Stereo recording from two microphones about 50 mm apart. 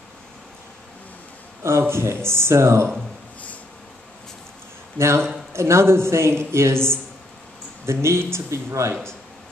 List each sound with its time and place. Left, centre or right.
1.6 s a man's voice: right
4.9 s a man's voice: right